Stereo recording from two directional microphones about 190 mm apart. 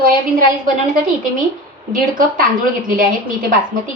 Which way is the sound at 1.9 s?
45° right (ahead or behind).